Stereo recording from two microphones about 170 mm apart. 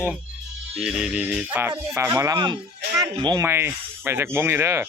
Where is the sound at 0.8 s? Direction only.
5° right (ahead or behind); by 3.4 s 25° right (ahead or behind).